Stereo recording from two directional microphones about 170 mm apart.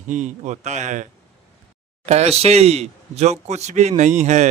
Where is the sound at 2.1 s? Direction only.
40° right (ahead or behind).